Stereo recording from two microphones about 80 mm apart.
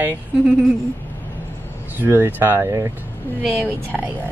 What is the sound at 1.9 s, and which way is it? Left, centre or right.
Speech, right.